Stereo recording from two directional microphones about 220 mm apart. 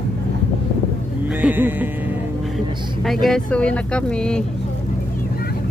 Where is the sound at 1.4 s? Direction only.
10° right (ahead or behind).